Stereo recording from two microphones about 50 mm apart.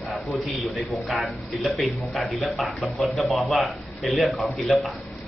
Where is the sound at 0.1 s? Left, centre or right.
Centre.